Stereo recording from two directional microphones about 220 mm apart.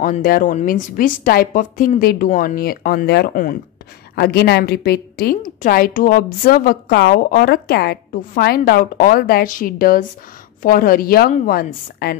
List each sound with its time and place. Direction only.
0.0 s a woman's voice: 40° left (ahead or behind)